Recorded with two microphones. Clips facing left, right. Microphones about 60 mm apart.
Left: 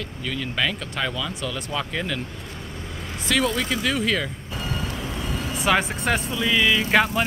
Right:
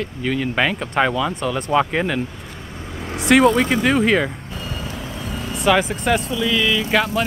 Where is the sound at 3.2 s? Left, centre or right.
Right.